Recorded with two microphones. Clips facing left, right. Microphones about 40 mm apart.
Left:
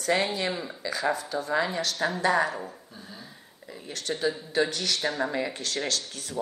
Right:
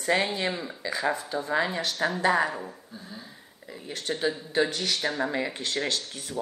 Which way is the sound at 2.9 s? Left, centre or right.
Centre.